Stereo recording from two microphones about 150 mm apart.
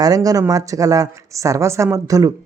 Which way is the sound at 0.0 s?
25° right (ahead or behind).